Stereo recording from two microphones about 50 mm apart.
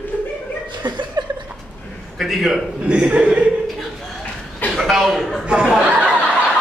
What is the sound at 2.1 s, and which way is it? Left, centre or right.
Speech, centre.